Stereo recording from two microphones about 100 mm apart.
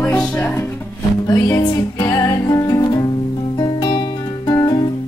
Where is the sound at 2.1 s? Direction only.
35° left (ahead or behind).